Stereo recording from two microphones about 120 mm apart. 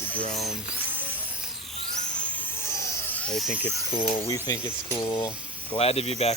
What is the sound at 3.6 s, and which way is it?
Speech, 55° left (ahead or behind).